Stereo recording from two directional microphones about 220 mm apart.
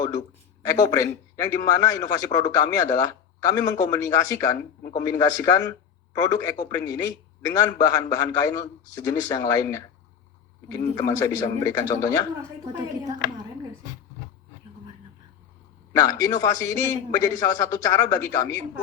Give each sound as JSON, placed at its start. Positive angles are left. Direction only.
{"t": 0.9, "sound": "a man's voice", "side_deg": 15}
{"t": 4.8, "sound": "a man's voice", "side_deg": 40}
{"t": 5.0, "sound": "a man's voice", "side_deg": 15}
{"t": 15.9, "sound": "a man's voice", "side_deg": 15}